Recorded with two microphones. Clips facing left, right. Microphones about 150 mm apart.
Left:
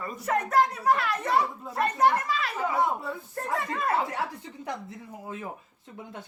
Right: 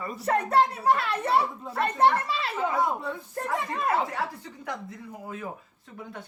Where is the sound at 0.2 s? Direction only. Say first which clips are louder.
Right 1 dB; 30° right (ahead or behind).